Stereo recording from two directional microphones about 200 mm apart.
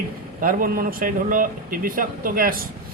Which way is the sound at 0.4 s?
45° right (ahead or behind).